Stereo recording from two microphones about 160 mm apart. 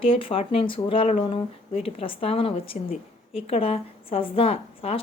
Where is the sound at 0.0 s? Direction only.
35° left (ahead or behind).